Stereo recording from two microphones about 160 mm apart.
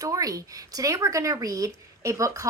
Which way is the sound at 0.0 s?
20° right (ahead or behind).